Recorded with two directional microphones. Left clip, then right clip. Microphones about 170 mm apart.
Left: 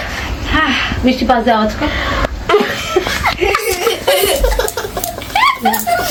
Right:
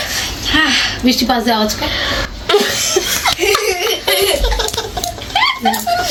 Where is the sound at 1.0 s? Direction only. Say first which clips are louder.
Left 5 dB; 45° left (ahead or behind).